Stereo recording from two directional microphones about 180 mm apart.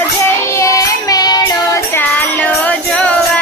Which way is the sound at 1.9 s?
5° left (ahead or behind).